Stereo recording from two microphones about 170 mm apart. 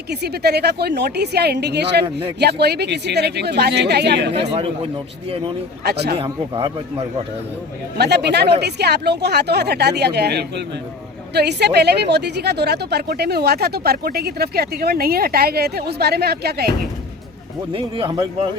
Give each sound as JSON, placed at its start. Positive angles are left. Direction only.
{"t": 0.1, "sound": "a woman's voice", "side_deg": -70}
{"t": 4.4, "sound": "a man's voice", "side_deg": -35}
{"t": 5.8, "sound": "a woman's voice", "side_deg": -70}
{"t": 6.1, "sound": "a man's voice", "side_deg": -30}
{"t": 7.9, "sound": "a woman's voice", "side_deg": -75}
{"t": 17.7, "sound": "a man's voice", "side_deg": -30}